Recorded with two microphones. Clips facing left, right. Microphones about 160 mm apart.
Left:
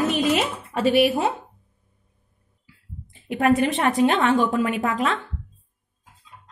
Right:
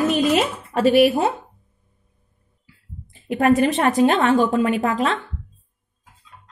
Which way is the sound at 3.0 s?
40° right (ahead or behind).